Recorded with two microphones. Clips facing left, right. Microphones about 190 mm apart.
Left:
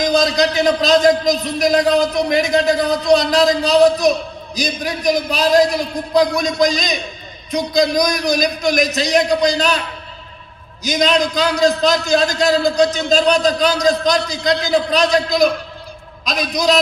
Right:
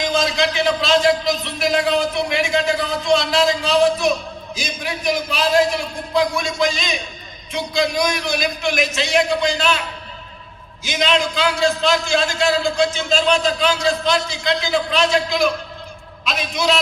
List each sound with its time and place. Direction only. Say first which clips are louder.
0.0 s a man's voice: left 4 dB; 40° left (ahead or behind)
10.8 s a man's voice: left 4 dB; 40° left (ahead or behind)